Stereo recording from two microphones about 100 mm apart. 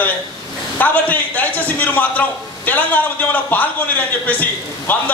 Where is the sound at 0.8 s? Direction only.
15° left (ahead or behind).